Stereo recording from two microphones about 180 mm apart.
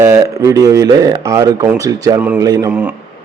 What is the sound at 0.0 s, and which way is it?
A man's voice, 15° right (ahead or behind).